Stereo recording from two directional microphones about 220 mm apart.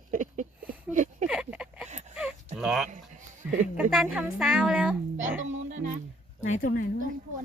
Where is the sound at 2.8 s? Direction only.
35° right (ahead or behind).